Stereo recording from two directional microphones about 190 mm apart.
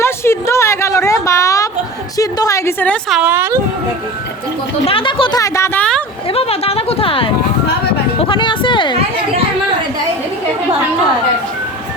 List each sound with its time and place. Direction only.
0.0 s a sound: 15° left (ahead or behind)
2.1 s a woman's voice: 15° left (ahead or behind)
3.2 s speech: 10° right (ahead or behind)
4.9 s speech: 30° left (ahead or behind); by 6.0 s 10° left (ahead or behind)
6.3 s speech: 30° left (ahead or behind)
8.2 s a sound: 25° left (ahead or behind)